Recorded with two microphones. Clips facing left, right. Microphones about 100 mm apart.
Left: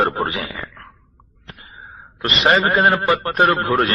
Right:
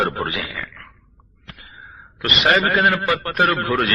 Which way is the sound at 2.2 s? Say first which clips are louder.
Left 1 dB; 30° left (ahead or behind).